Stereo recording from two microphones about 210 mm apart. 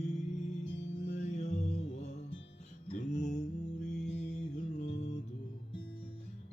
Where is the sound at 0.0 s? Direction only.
35° left (ahead or behind).